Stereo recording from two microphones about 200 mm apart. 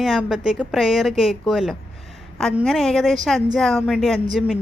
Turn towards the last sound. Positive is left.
turn(degrees=-5)  # may be behind; listen again after turning